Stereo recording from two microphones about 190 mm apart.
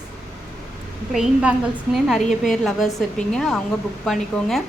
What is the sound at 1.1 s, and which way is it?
A woman's voice, 5° right (ahead or behind).